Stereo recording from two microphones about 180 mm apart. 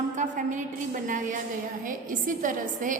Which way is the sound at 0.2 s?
45° right (ahead or behind).